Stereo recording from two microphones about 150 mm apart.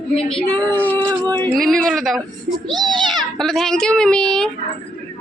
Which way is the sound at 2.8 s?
30° right (ahead or behind).